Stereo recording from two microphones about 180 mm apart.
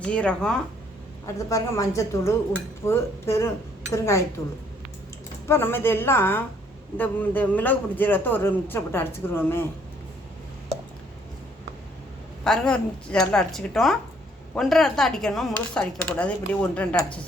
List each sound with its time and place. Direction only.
0.0 s speech: 5° left (ahead or behind)
1.4 s a man's voice: 15° left (ahead or behind)
5.5 s a man's voice: 15° left (ahead or behind)
12.5 s speech: 5° left (ahead or behind)